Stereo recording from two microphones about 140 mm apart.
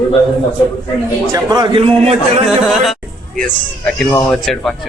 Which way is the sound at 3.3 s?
5° left (ahead or behind).